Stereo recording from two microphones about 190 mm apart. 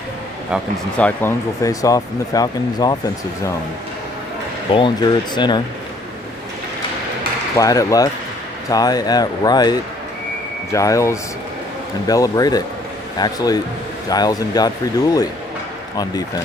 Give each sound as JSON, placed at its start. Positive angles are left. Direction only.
{"t": 0.9, "sound": "speech", "side_deg": 10}
{"t": 4.7, "sound": "speech", "side_deg": 25}
{"t": 7.5, "sound": "speech", "side_deg": 15}
{"t": 16.0, "sound": "speech", "side_deg": 20}